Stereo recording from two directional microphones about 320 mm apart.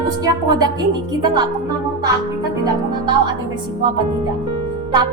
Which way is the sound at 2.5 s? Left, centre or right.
Centre.